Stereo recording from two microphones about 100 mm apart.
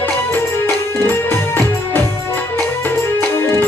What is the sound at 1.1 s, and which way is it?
Music, 20° left (ahead or behind).